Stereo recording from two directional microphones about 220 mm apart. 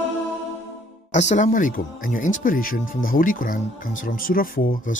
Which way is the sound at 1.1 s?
35° left (ahead or behind).